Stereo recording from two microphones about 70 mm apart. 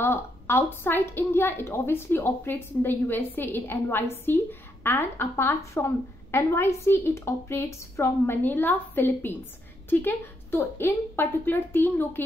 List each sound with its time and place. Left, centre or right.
0.0 s a woman's voice: left